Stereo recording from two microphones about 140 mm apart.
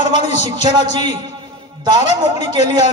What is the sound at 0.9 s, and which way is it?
Speech, 30° right (ahead or behind).